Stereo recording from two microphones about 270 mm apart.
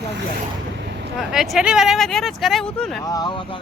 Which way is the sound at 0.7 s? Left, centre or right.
Right.